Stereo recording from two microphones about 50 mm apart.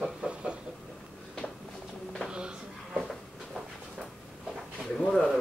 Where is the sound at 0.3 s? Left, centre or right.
Centre.